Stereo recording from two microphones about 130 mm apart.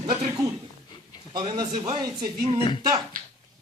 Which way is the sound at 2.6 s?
40° left (ahead or behind).